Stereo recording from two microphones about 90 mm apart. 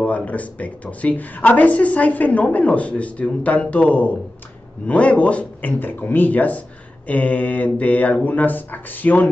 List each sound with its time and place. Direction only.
0.0 s a man's voice: 15° left (ahead or behind)